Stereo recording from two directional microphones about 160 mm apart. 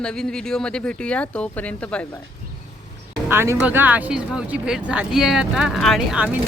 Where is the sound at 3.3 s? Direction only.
15° right (ahead or behind).